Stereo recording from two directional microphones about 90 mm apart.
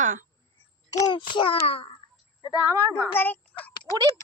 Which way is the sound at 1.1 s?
55° left (ahead or behind).